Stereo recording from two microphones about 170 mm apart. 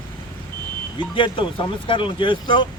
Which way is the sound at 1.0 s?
30° left (ahead or behind).